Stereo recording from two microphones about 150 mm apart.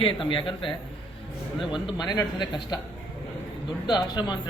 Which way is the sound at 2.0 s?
25° left (ahead or behind).